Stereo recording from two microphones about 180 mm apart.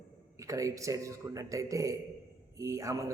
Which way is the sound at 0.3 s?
20° right (ahead or behind).